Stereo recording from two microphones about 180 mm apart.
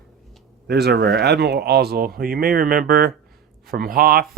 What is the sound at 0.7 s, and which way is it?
A man's voice, 65° right (ahead or behind).